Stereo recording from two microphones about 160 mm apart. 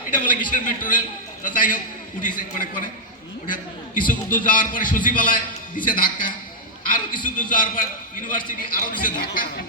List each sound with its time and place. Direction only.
0.5 s a man's voice: 55° left (ahead or behind)